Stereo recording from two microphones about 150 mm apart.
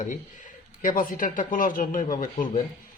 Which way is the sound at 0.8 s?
60° left (ahead or behind).